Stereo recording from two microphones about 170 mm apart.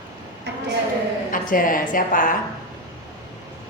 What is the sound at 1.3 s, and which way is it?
A woman's voice, 55° left (ahead or behind).